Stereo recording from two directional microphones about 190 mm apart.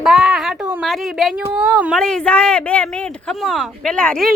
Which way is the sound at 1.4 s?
5° right (ahead or behind).